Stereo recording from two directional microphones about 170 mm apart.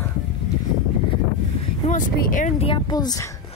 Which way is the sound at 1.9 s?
50° left (ahead or behind).